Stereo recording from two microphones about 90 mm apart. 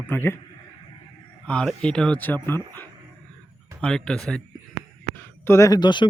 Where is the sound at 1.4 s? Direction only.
10° left (ahead or behind).